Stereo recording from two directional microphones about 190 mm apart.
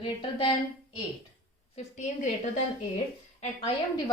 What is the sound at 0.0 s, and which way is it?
Speech, 25° left (ahead or behind).